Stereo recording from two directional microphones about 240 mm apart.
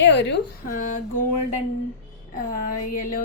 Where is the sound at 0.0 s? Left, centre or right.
Left.